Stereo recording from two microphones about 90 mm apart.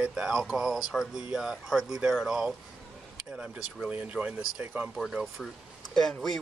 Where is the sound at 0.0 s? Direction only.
10° right (ahead or behind).